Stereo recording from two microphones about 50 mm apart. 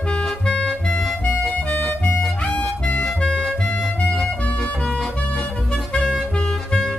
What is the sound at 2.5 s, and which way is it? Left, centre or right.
Harmonica, left.